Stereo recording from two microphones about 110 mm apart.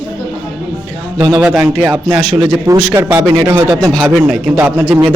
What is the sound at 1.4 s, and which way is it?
Speech, 5° right (ahead or behind).